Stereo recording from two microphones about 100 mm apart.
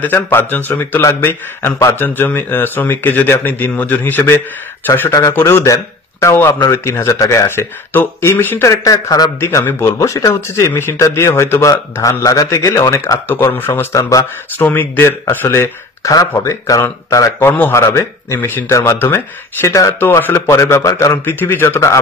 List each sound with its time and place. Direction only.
0.0 s speech: 20° left (ahead or behind)
1.0 s a man's voice: 30° left (ahead or behind)
8.6 s speech: 40° left (ahead or behind)
17.5 s a man's voice: 20° left (ahead or behind)